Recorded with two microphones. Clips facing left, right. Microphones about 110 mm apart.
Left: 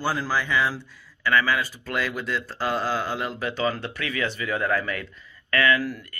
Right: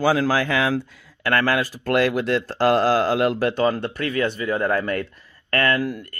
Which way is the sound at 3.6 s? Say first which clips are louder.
Right 5 dB; 45° right (ahead or behind).